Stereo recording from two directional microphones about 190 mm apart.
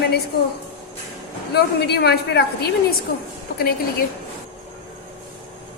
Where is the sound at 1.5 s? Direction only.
60° left (ahead or behind).